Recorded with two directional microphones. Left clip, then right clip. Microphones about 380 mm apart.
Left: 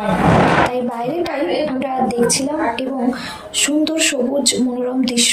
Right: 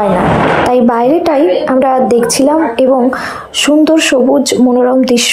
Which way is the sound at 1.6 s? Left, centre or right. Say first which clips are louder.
Right 10 dB; right.